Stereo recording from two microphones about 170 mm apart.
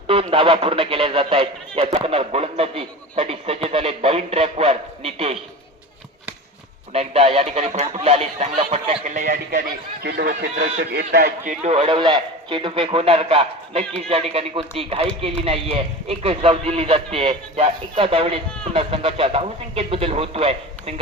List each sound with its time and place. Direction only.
0.1 s a sound: 35° right (ahead or behind)
6.9 s speech: 35° right (ahead or behind); by 11.3 s 80° right
11.4 s a man's voice: 40° right (ahead or behind)